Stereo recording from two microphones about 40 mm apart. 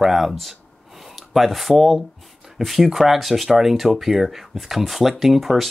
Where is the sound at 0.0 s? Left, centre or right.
Centre.